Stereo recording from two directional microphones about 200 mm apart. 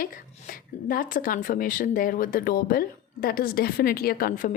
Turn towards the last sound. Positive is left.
turn(degrees=45)  # may be behind; listen again after turning